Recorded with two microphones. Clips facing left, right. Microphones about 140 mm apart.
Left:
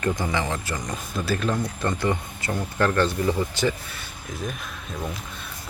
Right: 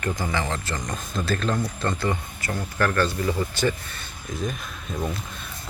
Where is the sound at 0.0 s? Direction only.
20° left (ahead or behind).